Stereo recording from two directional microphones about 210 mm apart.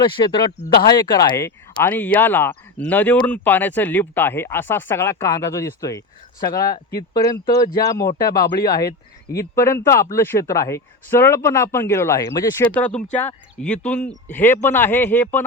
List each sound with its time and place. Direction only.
0.0 s speech: 25° left (ahead or behind)
6.4 s speech: 45° left (ahead or behind)
7.2 s speech: 15° left (ahead or behind)
8.6 s speech: 45° left (ahead or behind)
9.6 s speech: 15° left (ahead or behind)